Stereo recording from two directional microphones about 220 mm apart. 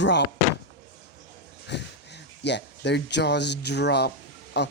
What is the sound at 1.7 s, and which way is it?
Speech, 50° left (ahead or behind).